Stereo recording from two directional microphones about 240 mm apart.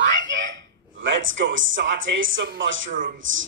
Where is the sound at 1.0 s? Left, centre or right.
Right.